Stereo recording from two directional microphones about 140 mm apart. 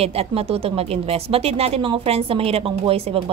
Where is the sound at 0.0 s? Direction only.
45° right (ahead or behind).